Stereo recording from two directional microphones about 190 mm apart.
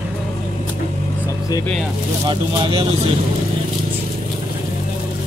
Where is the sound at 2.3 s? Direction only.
25° right (ahead or behind).